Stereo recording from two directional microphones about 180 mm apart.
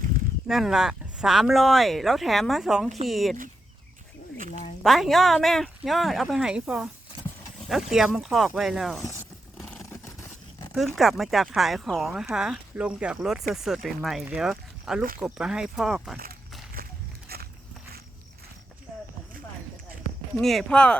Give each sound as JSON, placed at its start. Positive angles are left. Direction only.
{"t": 0.4, "sound": "speech", "side_deg": 0}
{"t": 4.8, "sound": "speech", "side_deg": 0}
{"t": 10.8, "sound": "speech", "side_deg": 0}
{"t": 16.8, "sound": "biting", "side_deg": -55}
{"t": 17.2, "sound": "walk", "side_deg": -60}
{"t": 20.4, "sound": "speech", "side_deg": 0}